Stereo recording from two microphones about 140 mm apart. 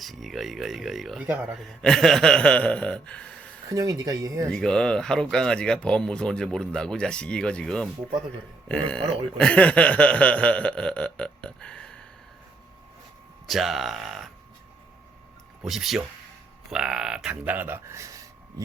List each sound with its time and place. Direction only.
0.0 s speech: centre (ahead or behind)
3.7 s speech: 25° right (ahead or behind)
4.4 s speech: 5° left (ahead or behind)
13.5 s speech: centre (ahead or behind)
15.6 s speech: centre (ahead or behind); by 18.3 s 20° right (ahead or behind)